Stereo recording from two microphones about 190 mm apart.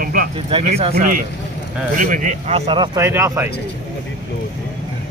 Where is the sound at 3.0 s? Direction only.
15° right (ahead or behind).